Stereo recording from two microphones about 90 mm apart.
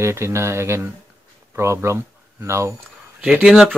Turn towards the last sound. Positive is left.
turn(degrees=-5)  # may be behind; listen again after turning